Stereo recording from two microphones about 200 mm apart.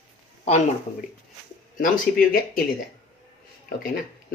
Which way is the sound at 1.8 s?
45° left (ahead or behind).